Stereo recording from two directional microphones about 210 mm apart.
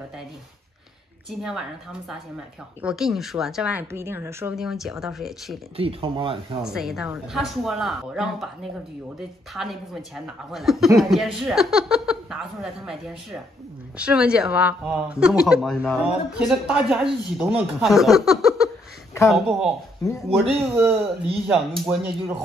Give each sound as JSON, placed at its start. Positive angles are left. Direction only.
{"t": 1.4, "sound": "speech", "side_deg": 0}
{"t": 5.8, "sound": "speech", "side_deg": -25}
{"t": 6.6, "sound": "speech", "side_deg": 0}
{"t": 9.5, "sound": "speech", "side_deg": 0}